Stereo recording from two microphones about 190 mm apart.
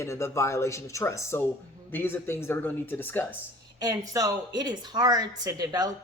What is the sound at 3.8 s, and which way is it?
A woman's voice, 20° right (ahead or behind).